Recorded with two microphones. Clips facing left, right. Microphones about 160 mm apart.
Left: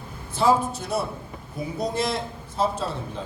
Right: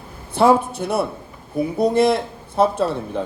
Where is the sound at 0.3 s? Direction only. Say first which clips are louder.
Right 5 dB; 60° right (ahead or behind).